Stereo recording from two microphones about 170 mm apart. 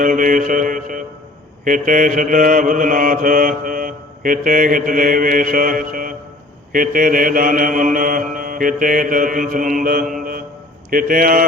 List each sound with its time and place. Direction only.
0.0 s mantra: 50° right (ahead or behind)
10.9 s speech: 55° right (ahead or behind)